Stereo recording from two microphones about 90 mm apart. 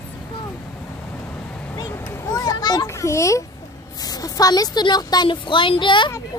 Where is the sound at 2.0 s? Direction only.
30° left (ahead or behind); by 2.9 s 50° left (ahead or behind).